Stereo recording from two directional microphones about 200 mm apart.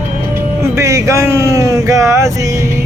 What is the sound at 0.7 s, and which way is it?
Speech, 15° right (ahead or behind).